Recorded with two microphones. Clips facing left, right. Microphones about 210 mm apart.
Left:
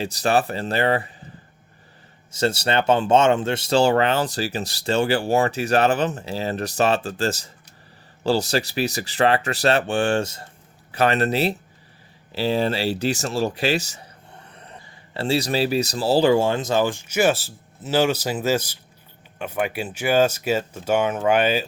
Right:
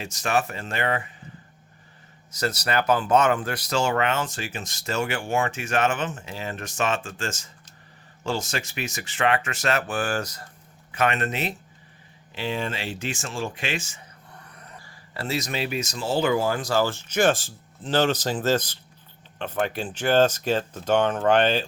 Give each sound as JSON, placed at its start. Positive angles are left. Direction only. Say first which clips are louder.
{"t": 0.0, "sound": "speech", "louder": "left 5 dB", "side_deg": 35}
{"t": 2.3, "sound": "speech", "louder": "left 4 dB", "side_deg": 30}
{"t": 14.5, "sound": "speech", "louder": "left 3 dB", "side_deg": 30}